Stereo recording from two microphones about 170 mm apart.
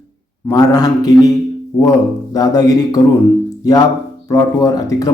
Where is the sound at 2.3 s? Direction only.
20° left (ahead or behind).